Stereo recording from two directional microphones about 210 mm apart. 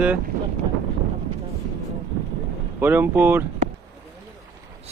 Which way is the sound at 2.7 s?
10° right (ahead or behind).